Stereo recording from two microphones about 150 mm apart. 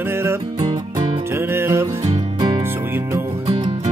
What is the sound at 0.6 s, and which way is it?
Music, 30° right (ahead or behind).